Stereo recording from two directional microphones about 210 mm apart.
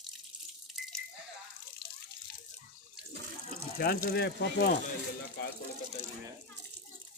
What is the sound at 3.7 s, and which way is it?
Speech, 45° left (ahead or behind).